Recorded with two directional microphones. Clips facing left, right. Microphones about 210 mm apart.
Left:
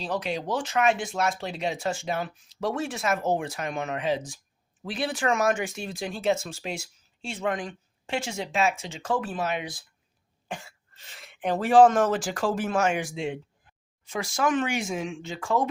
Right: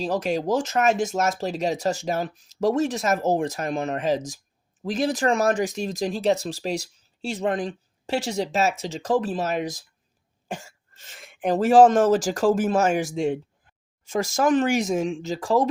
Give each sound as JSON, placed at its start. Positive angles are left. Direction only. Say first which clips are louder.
{"t": 0.0, "sound": "speech", "louder": "right 6 dB", "side_deg": -45}
{"t": 10.5, "sound": "throat clearing", "louder": "right 3 dB", "side_deg": -45}
{"t": 11.5, "sound": "speech", "louder": "right 3 dB", "side_deg": -40}